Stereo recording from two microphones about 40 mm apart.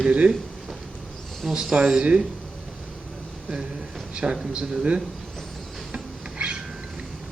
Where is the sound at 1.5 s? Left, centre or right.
Centre.